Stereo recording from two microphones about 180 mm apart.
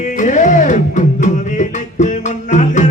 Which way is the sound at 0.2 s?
45° left (ahead or behind).